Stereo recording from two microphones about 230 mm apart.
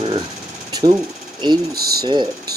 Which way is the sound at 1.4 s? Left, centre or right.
Centre.